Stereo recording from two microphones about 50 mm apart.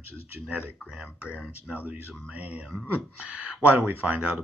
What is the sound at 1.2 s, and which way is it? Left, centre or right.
Speech, right.